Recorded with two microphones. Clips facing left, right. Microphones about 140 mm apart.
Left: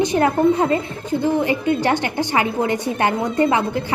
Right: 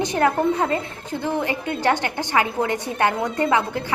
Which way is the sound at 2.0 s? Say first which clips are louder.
Left 2 dB; 15° left (ahead or behind).